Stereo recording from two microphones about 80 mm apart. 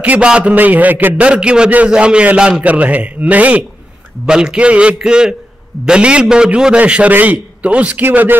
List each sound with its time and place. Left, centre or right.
0.0 s a man's voice: centre